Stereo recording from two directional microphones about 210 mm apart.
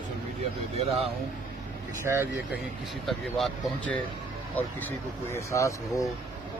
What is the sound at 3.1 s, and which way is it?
Speech, centre (ahead or behind).